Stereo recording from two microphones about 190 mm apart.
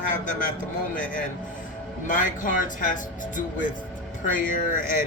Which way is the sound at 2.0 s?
45° left (ahead or behind).